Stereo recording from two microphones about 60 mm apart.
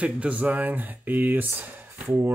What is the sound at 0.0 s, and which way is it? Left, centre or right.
Speech, right.